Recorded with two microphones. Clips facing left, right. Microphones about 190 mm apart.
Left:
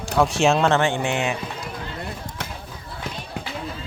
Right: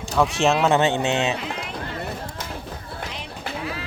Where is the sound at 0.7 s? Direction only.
20° right (ahead or behind).